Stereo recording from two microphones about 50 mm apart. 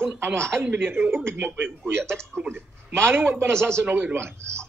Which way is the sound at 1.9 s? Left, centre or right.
Right.